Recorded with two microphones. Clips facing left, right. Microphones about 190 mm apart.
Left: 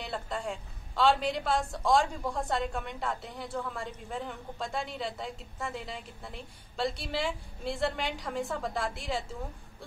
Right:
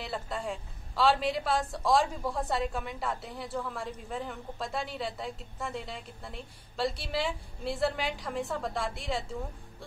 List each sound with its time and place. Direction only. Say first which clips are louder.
0.0 s a woman's voice: even; centre (ahead or behind)